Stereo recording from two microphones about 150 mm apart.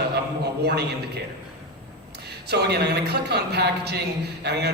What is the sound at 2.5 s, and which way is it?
A woman's voice, 90° right.